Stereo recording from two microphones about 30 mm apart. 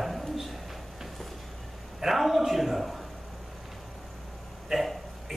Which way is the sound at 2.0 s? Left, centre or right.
Centre.